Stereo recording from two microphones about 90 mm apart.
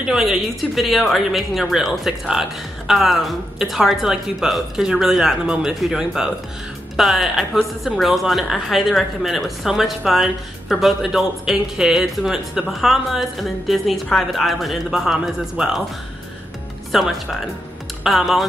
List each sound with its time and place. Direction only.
0.0 s a woman's voice: 5° right (ahead or behind)
16.9 s a woman's voice: centre (ahead or behind)